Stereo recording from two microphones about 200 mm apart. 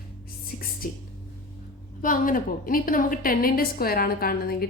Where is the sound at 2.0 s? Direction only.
45° left (ahead or behind).